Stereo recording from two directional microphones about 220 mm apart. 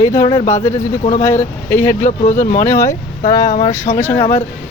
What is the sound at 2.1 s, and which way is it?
Speech, 35° left (ahead or behind).